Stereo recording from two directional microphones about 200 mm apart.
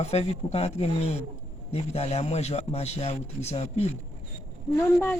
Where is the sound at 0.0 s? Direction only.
30° left (ahead or behind).